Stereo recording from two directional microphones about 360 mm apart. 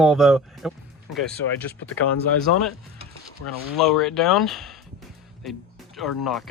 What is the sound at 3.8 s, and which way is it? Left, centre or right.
Speech, centre.